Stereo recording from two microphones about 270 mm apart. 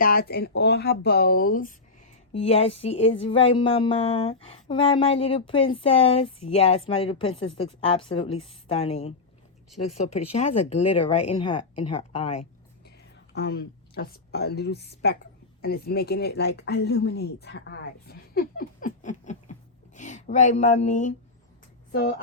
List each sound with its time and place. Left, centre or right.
0.0 s speech: left
10.2 s speech: left
13.3 s a woman's voice: left